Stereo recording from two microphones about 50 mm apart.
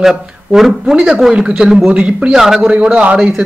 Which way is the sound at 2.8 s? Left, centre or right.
Right.